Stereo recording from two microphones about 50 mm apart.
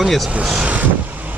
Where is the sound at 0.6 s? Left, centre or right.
Right.